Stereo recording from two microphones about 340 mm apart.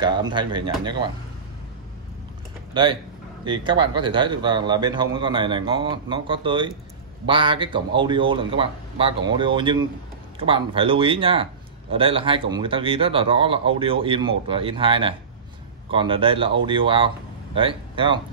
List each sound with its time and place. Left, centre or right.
0.0 s speech: centre
2.7 s speech: centre